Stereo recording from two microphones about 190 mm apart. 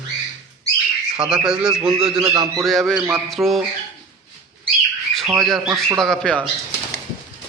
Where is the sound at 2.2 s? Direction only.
25° right (ahead or behind).